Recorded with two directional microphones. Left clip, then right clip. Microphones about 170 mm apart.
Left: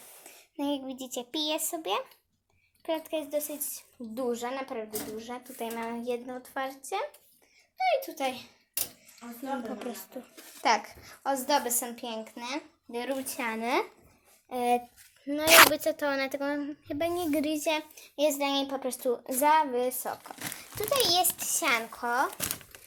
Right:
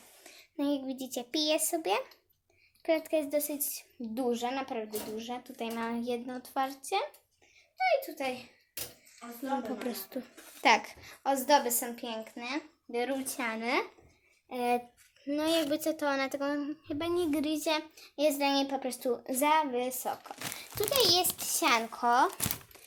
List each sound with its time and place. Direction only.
0.3 s a child's voice: 10° right (ahead or behind)
7.8 s a child's voice: 10° left (ahead or behind)
9.6 s speech: 20° right (ahead or behind)
11.1 s a child's voice: 10° right (ahead or behind)
22.0 s speech: 30° right (ahead or behind)